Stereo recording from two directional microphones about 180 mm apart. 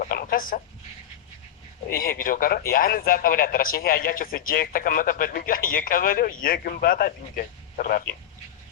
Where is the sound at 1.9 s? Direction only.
55° left (ahead or behind).